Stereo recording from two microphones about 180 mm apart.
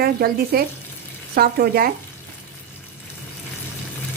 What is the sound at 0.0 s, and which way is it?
Speech, 55° right (ahead or behind).